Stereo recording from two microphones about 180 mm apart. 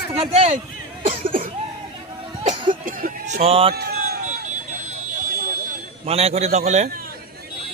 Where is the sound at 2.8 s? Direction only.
50° right (ahead or behind).